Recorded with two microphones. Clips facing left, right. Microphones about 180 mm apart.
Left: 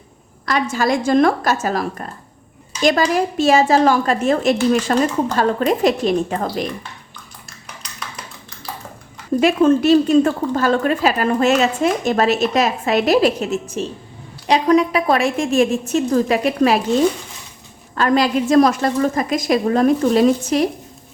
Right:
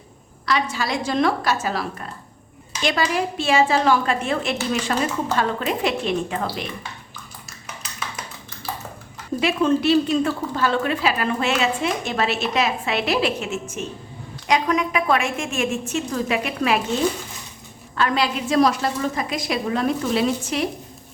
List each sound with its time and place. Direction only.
0.4 s a woman's voice: 45° left (ahead or behind)
7.8 s a sound: centre (ahead or behind)
9.4 s a woman's voice: 45° left (ahead or behind)
17.9 s speech: 45° left (ahead or behind)